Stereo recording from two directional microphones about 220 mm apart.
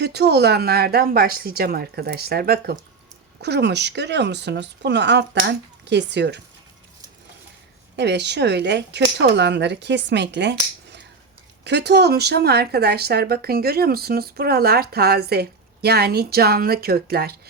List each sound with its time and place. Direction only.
0.0 s speech: 50° right (ahead or behind)
7.9 s speech: 50° right (ahead or behind)